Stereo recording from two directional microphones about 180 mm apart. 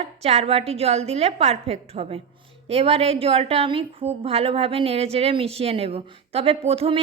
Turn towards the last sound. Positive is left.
turn(degrees=-35)  # may be behind; listen again after turning